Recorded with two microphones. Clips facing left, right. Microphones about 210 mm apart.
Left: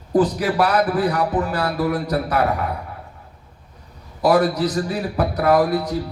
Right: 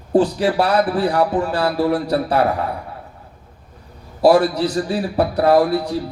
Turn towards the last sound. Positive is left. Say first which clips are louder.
# right 2 dB
turn(degrees=-30)  # may be behind; listen again after turning